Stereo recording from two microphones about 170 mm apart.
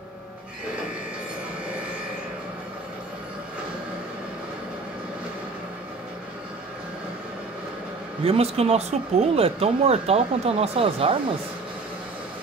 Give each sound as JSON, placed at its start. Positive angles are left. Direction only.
{"t": 8.2, "sound": "speech", "side_deg": -35}